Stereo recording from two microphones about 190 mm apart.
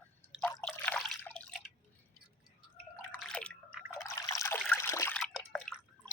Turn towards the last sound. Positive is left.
turn(degrees=0)  # may be behind; listen again after turning